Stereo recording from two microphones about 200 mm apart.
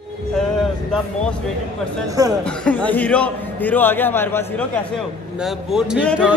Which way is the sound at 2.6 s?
5° left (ahead or behind).